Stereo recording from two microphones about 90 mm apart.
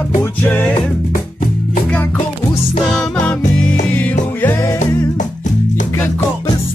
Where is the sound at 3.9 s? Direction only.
15° left (ahead or behind).